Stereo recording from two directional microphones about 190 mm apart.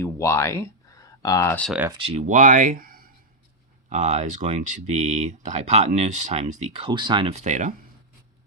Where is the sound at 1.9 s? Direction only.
30° right (ahead or behind); by 3.1 s 50° right (ahead or behind).